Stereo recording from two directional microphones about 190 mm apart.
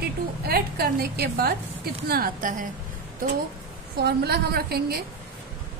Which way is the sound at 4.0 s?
60° right (ahead or behind).